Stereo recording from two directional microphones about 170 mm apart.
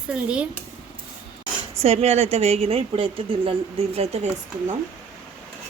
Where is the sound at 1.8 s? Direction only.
40° right (ahead or behind).